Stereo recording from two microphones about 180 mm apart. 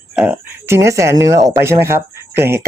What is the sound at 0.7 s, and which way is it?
Speech, 15° right (ahead or behind).